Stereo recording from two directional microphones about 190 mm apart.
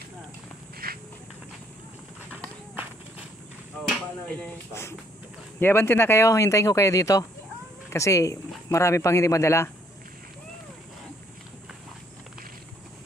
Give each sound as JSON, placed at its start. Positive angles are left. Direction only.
{"t": 0.8, "sound": "walk", "side_deg": -50}
{"t": 2.7, "sound": "run", "side_deg": -10}
{"t": 3.9, "sound": "speech", "side_deg": 5}